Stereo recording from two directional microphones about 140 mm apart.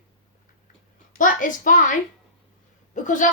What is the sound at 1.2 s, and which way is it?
A woman's voice, 70° left (ahead or behind).